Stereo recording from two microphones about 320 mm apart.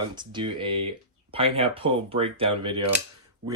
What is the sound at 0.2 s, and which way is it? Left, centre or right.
Speech, centre.